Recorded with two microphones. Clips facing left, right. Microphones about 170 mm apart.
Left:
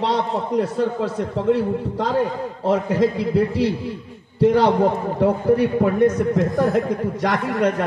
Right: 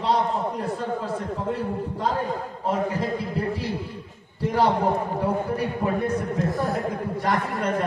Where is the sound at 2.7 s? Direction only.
80° left.